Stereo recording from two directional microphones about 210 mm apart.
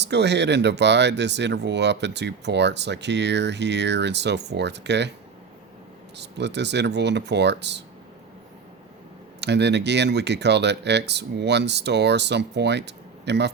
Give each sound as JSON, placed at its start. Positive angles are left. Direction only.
{"t": 0.0, "sound": "speech", "side_deg": -55}
{"t": 6.1, "sound": "speech", "side_deg": -55}
{"t": 9.4, "sound": "speech", "side_deg": -55}